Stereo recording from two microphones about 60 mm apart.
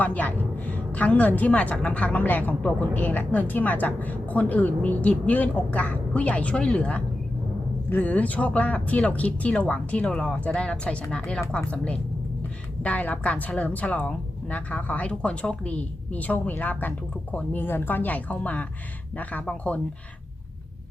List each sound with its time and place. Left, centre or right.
0.0 s a woman's voice: left